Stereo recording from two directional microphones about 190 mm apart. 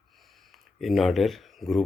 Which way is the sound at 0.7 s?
Centre (ahead or behind).